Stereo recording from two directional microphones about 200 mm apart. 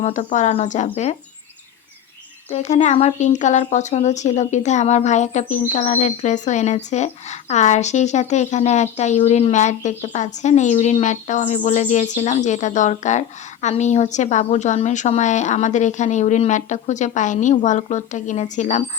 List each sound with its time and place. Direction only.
0.0 s speech: 35° left (ahead or behind)
2.5 s speech: 35° left (ahead or behind)